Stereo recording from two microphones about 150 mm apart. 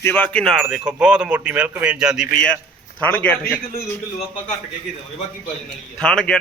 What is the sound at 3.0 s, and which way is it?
Speech, 10° left (ahead or behind).